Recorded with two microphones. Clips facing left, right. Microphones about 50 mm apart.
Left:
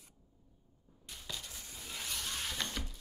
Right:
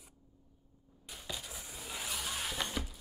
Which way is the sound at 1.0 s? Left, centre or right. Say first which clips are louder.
Right 2 dB; centre.